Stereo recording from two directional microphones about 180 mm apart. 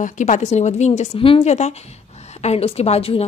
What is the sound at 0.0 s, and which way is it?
A woman's voice, 45° left (ahead or behind).